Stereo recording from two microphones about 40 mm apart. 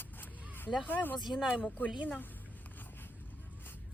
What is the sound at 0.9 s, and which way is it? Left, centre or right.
Speech, left.